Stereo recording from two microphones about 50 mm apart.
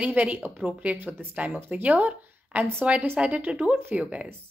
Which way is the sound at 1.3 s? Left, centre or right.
Right.